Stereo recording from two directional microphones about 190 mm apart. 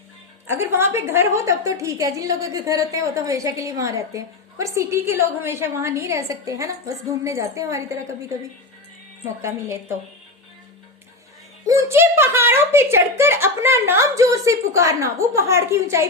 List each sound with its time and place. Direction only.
0.4 s a woman's voice: 10° right (ahead or behind)
9.4 s a woman's voice: 15° right (ahead or behind)
11.6 s a woman's voice: 15° right (ahead or behind)